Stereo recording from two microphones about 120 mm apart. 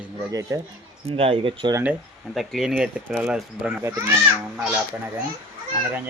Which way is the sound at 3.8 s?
25° right (ahead or behind).